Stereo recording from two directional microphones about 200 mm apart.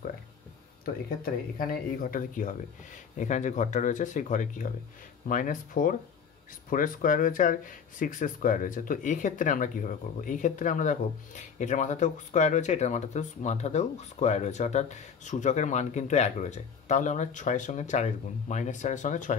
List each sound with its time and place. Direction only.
0.8 s speech: 45° left (ahead or behind)